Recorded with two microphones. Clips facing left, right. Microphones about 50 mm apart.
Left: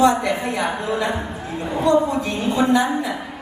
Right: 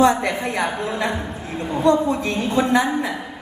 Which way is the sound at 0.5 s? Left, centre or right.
Right.